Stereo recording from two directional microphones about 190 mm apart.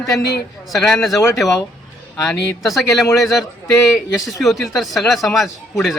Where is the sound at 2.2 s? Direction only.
Centre (ahead or behind).